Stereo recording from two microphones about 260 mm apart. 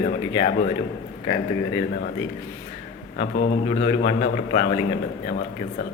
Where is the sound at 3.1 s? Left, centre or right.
Left.